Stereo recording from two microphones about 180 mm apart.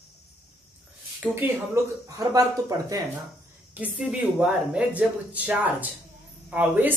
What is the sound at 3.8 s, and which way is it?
Speech, 5° right (ahead or behind).